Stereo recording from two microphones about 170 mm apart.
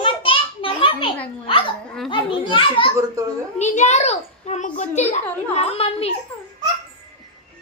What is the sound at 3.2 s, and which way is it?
Speech, 20° right (ahead or behind).